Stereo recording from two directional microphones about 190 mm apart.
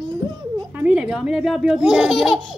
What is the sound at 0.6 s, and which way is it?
A child's voice, 10° right (ahead or behind).